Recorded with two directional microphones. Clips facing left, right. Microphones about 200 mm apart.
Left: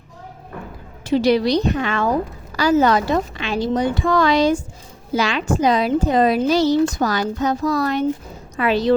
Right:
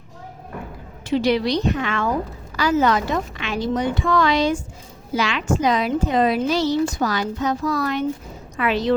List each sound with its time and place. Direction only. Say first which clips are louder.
1.0 s a woman's voice: left 3 dB; 40° left (ahead or behind)